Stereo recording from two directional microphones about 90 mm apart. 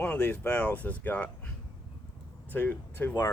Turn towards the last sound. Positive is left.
turn(degrees=25)  # may be behind; listen again after turning